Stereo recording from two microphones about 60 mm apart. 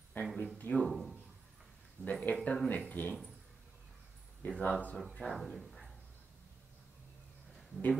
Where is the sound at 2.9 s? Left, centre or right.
Left.